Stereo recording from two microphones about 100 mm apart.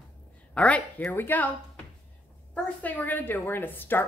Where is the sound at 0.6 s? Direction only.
15° left (ahead or behind).